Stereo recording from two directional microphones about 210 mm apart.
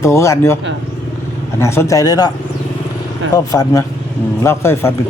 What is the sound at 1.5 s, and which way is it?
Speech, 15° left (ahead or behind).